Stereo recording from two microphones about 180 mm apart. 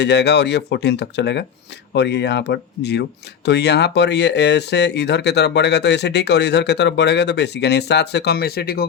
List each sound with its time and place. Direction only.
0.0 s speech: 70° left (ahead or behind)